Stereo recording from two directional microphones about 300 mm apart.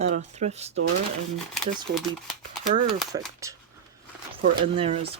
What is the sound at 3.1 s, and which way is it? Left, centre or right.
Speech, centre.